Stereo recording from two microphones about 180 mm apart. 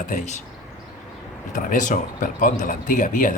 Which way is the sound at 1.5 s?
45° left (ahead or behind).